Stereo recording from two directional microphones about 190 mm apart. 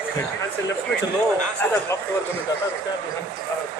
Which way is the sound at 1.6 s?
10° left (ahead or behind).